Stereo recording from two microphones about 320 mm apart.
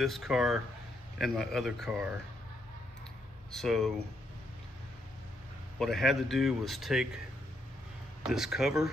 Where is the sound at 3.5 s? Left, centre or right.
Centre.